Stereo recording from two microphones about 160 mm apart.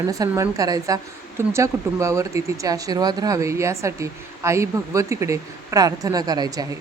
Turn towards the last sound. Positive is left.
turn(degrees=-25)  # may be behind; listen again after turning